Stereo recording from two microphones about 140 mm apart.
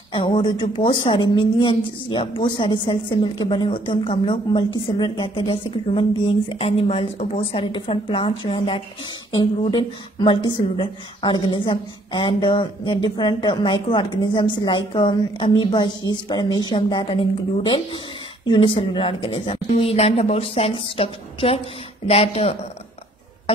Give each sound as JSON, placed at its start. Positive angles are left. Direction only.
{"t": 0.1, "sound": "speech", "side_deg": 35}
{"t": 18.9, "sound": "speech", "side_deg": 40}